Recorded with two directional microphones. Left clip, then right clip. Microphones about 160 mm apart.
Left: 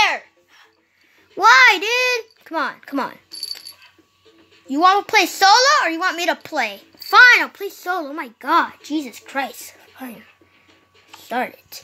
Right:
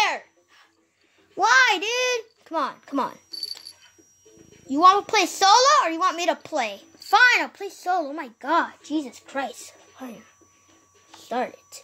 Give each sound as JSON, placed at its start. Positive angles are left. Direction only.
{"t": 0.0, "sound": "babbling", "side_deg": -10}
{"t": 1.4, "sound": "a sound", "side_deg": 0}
{"t": 4.6, "sound": "a child's voice", "side_deg": -10}
{"t": 11.1, "sound": "music", "side_deg": -5}